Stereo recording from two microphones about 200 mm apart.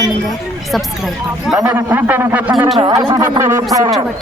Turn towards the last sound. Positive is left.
turn(degrees=-15)  # may be behind; listen again after turning